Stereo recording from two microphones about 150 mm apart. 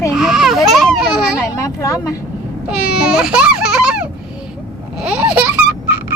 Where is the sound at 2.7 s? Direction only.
5° right (ahead or behind).